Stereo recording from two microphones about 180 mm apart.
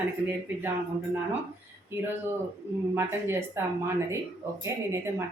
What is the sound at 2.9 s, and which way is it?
Speech, 10° right (ahead or behind).